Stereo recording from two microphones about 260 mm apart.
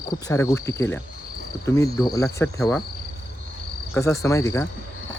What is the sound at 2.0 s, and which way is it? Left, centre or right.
Speech, centre.